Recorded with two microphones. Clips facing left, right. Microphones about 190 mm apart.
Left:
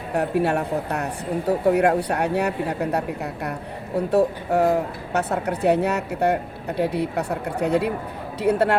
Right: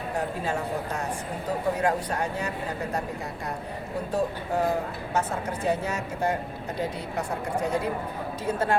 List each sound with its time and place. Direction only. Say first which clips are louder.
0.1 s speech: left 9 dB; 65° left (ahead or behind)